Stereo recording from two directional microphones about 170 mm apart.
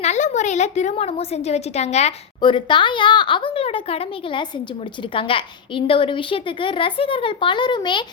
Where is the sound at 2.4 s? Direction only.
30° left (ahead or behind).